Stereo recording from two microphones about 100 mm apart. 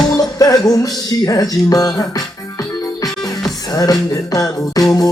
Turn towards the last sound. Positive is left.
turn(degrees=40)  # may be behind; listen again after turning